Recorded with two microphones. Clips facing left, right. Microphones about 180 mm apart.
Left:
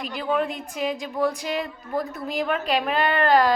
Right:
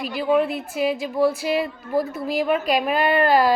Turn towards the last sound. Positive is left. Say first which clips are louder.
# right 2 dB
turn(degrees=-10)  # may be behind; listen again after turning